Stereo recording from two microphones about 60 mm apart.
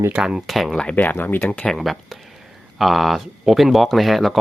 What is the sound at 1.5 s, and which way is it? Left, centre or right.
Speech, left.